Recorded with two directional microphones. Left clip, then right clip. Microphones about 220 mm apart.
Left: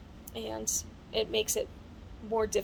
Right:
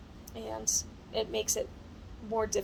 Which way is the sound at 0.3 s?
20° left (ahead or behind).